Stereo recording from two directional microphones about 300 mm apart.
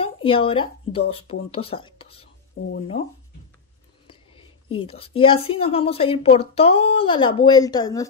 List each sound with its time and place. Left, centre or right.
0.0 s speech: centre
2.6 s speech: left
4.1 s a woman's voice: centre